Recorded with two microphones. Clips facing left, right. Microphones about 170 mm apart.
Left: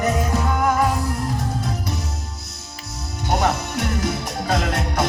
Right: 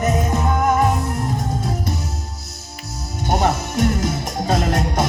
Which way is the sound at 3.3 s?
25° right (ahead or behind).